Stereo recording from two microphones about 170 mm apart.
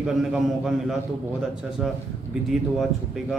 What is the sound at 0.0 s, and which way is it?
Speech, 5° right (ahead or behind).